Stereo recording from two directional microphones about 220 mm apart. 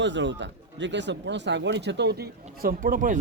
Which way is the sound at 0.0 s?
55° right (ahead or behind).